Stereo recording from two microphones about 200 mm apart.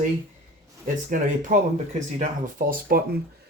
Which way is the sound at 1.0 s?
40° right (ahead or behind).